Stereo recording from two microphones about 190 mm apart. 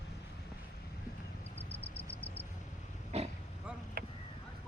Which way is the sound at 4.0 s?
55° right (ahead or behind).